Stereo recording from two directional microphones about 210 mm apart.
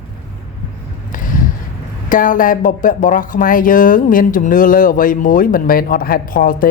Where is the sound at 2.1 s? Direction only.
40° left (ahead or behind).